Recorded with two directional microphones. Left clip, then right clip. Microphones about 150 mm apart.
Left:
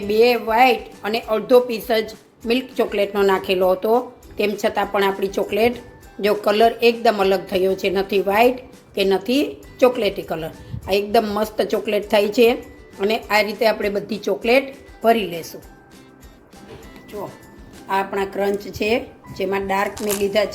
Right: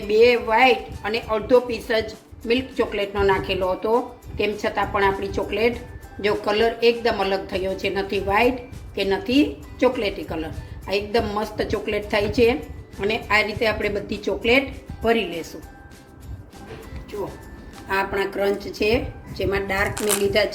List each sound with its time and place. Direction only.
0.1 s a woman's voice: 50° left (ahead or behind)
17.8 s speech: 45° left (ahead or behind)